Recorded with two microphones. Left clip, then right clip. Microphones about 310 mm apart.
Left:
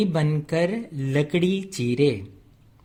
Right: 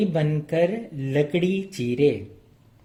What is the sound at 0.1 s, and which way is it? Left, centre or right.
Speech, left.